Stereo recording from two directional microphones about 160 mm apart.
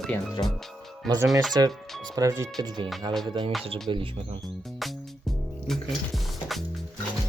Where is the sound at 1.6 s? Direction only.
25° right (ahead or behind).